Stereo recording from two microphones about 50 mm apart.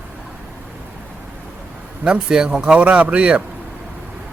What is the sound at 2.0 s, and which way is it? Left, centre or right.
Speech, centre.